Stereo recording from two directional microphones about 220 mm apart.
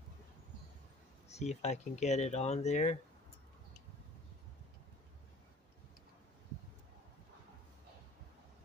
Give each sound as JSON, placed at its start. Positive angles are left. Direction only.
{"t": 1.3, "sound": "speech", "side_deg": 30}